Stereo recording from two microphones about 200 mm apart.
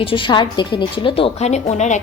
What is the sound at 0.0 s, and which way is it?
A woman's voice, 25° left (ahead or behind).